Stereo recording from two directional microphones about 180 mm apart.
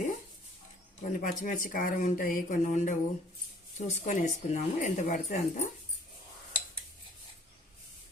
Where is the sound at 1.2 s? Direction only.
50° left (ahead or behind).